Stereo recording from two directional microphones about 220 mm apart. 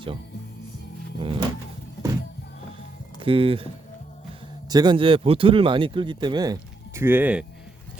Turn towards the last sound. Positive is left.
turn(degrees=-5)  # may be behind; listen again after turning